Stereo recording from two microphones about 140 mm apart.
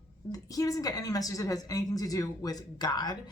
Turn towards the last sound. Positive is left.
turn(degrees=30)  # may be behind; listen again after turning